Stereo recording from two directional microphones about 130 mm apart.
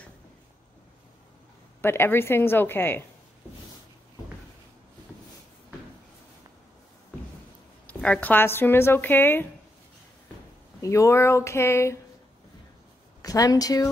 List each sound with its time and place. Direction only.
1.8 s speech: 15° left (ahead or behind)
7.8 s speech: 10° left (ahead or behind)
10.8 s speech: 25° left (ahead or behind)
13.2 s speech: 30° left (ahead or behind)